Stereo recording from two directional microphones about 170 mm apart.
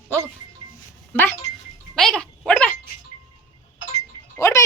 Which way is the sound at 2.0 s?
5° left (ahead or behind).